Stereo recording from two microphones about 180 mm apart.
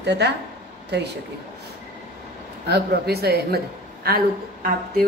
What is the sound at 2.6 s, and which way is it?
A woman's voice, 65° right (ahead or behind).